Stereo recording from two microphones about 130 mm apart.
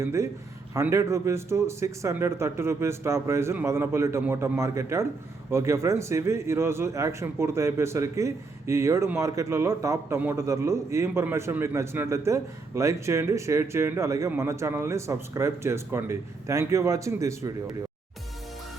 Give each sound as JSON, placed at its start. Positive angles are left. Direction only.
{"t": 0.0, "sound": "a man's voice", "side_deg": -20}